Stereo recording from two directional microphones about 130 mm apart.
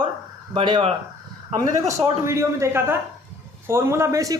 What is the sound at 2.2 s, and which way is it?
Speech, 20° right (ahead or behind).